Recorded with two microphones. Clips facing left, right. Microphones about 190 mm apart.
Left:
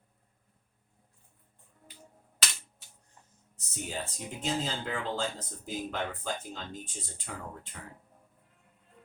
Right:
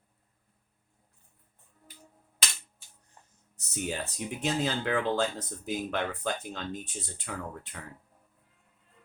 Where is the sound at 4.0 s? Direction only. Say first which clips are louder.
Right 4 dB; 70° right (ahead or behind).